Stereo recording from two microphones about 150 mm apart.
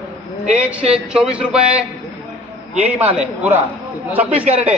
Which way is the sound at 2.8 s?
45° right (ahead or behind).